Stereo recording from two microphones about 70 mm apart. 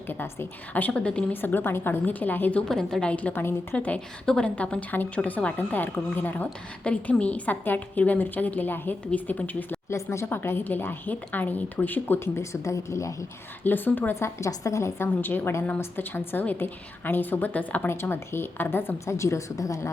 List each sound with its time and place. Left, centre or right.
0.1 s a woman's voice: left
1.3 s a woman's voice: left
2.6 s a woman's voice: centre; by 6.5 s left
6.8 s a woman's voice: centre
9.9 s a woman's voice: left
12.4 s a woman's voice: left
13.7 s a woman's voice: left
14.2 s a woman's voice: left
17.8 s a woman's voice: left